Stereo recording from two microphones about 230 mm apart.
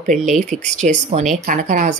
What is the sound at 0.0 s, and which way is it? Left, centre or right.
Speech, right.